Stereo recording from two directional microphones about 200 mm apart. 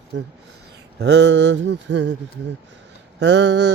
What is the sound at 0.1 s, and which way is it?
Music, 60° right (ahead or behind).